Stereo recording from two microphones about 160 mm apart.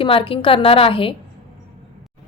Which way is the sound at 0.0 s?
35° left (ahead or behind).